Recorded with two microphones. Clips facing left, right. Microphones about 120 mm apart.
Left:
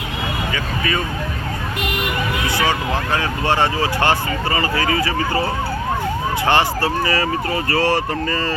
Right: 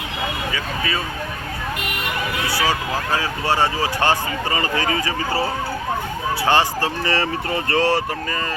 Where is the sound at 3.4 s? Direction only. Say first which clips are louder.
Left 2 dB; 10° right (ahead or behind).